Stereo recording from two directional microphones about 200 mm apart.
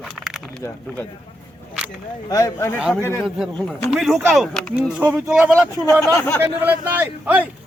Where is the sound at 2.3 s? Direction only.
15° left (ahead or behind).